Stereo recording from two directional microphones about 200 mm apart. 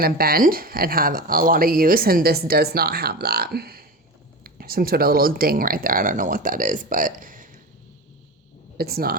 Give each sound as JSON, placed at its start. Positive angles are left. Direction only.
{"t": 0.0, "sound": "speech", "side_deg": -50}
{"t": 8.8, "sound": "speech", "side_deg": -50}